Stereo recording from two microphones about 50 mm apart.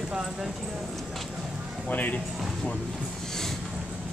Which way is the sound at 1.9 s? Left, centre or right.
Left.